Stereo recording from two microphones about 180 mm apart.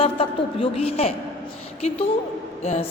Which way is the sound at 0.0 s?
30° left (ahead or behind).